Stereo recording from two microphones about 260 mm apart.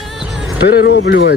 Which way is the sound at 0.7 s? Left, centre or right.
Left.